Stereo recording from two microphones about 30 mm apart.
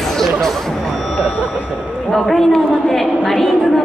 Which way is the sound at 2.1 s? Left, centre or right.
Centre.